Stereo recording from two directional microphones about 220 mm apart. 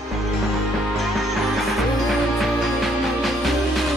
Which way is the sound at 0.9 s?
Centre (ahead or behind).